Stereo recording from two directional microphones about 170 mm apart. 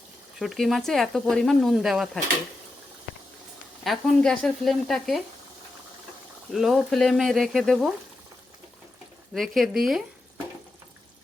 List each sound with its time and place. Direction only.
0.3 s speech: centre (ahead or behind)
3.8 s speech: centre (ahead or behind)
6.5 s speech: centre (ahead or behind)
9.3 s speech: centre (ahead or behind)